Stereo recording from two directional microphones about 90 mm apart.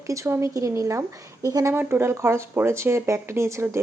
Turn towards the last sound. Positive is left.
turn(degrees=-30)  # may be behind; listen again after turning